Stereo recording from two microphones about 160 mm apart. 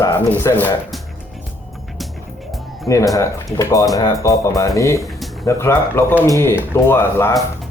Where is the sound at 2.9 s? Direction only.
20° left (ahead or behind).